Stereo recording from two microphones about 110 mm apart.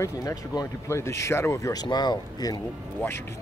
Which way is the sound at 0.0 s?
30° left (ahead or behind).